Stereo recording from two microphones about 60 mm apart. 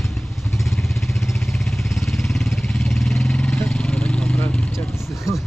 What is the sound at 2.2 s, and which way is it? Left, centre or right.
Vehicle, centre.